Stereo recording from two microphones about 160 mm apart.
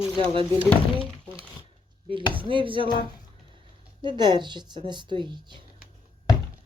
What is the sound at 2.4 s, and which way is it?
Speech, 30° right (ahead or behind).